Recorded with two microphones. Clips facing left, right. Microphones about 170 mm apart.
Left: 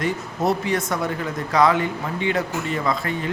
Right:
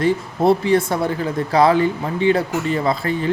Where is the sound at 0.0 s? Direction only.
30° right (ahead or behind).